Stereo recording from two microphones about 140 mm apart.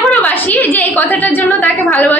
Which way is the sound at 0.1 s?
10° left (ahead or behind).